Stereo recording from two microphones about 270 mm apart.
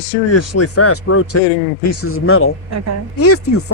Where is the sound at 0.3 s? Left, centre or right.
Left.